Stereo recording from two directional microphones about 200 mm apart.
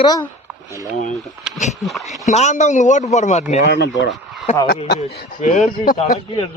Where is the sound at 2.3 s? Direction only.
35° left (ahead or behind).